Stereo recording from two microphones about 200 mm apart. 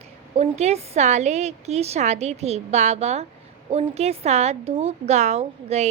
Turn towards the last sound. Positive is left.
turn(degrees=-35)  # may be behind; listen again after turning